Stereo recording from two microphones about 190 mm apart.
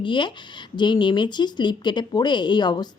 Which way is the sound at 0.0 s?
25° left (ahead or behind).